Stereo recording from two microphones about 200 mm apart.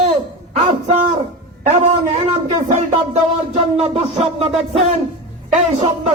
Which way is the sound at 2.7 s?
35° right (ahead or behind).